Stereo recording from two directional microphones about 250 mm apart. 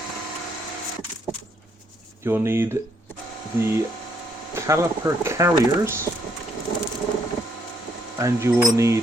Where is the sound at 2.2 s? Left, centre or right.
Centre.